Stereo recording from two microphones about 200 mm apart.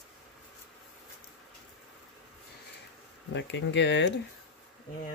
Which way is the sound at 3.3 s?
65° left (ahead or behind).